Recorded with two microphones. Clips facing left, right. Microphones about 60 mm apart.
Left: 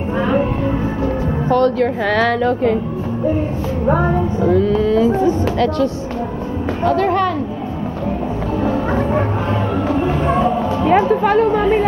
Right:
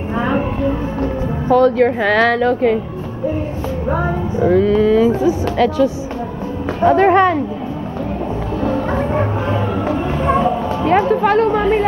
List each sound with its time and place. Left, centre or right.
1.5 s speech: centre
4.4 s music: centre
4.6 s speech: centre
6.8 s speech: right
8.5 s music: centre